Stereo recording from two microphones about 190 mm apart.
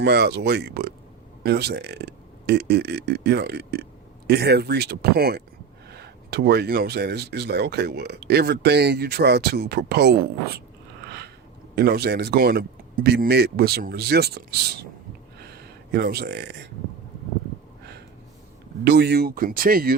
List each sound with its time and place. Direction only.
0.0 s speech: 60° right (ahead or behind)
11.7 s speech: 55° right (ahead or behind)
15.4 s a sound: 55° right (ahead or behind)
18.9 s speech: 60° right (ahead or behind)